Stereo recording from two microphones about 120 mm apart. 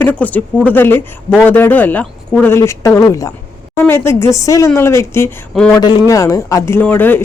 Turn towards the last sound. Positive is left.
turn(degrees=15)  # may be behind; listen again after turning